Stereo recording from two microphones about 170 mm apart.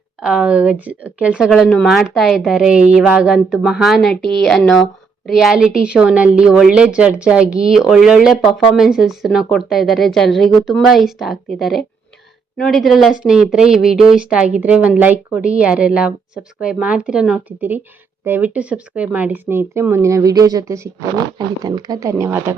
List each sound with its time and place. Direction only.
0.2 s speech: 5° right (ahead or behind)